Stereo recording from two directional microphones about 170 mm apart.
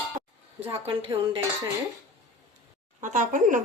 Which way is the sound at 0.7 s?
35° right (ahead or behind).